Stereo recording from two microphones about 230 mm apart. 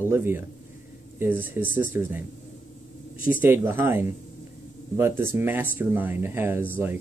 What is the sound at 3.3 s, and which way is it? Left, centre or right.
Speech, centre.